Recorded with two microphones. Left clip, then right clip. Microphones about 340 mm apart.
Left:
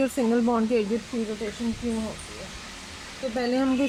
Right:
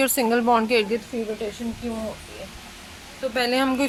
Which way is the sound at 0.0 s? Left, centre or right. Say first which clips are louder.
Right 4 dB; right.